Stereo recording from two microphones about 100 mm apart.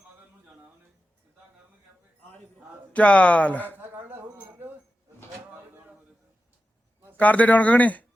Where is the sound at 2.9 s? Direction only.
15° left (ahead or behind).